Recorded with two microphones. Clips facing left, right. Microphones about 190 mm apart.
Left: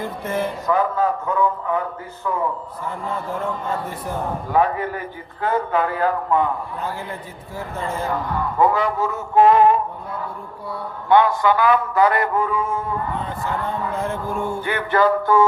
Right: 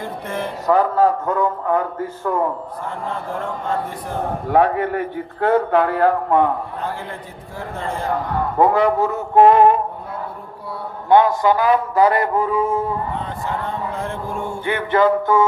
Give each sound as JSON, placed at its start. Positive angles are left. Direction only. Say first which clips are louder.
{"t": 0.3, "sound": "speech", "louder": "left 3 dB", "side_deg": 5}
{"t": 0.7, "sound": "a man's voice", "louder": "right 5 dB", "side_deg": -40}
{"t": 2.3, "sound": "a man's voice", "louder": "right 3 dB", "side_deg": -55}
{"t": 4.4, "sound": "a man's voice", "louder": "right 4 dB", "side_deg": -65}
{"t": 8.0, "sound": "a man's voice", "louder": "right 4 dB", "side_deg": -50}
{"t": 11.1, "sound": "a man's voice", "louder": "right 2 dB", "side_deg": -40}
{"t": 13.9, "sound": "mantra", "louder": "left 1 dB", "side_deg": 0}
{"t": 14.6, "sound": "music", "louder": "right 3 dB", "side_deg": -25}